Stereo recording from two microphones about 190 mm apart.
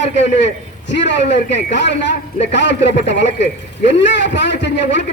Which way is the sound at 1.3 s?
65° left (ahead or behind).